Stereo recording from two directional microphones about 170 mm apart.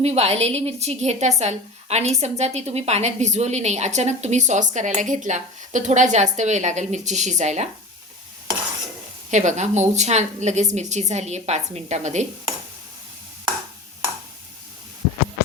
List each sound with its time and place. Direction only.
0.0 s a woman's voice: 40° right (ahead or behind)
9.3 s a woman's voice: 45° right (ahead or behind)